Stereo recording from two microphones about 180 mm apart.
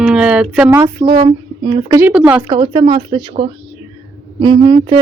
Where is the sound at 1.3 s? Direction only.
30° right (ahead or behind).